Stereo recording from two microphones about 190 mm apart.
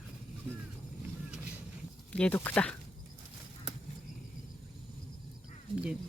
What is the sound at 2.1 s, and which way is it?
Speech, 5° left (ahead or behind).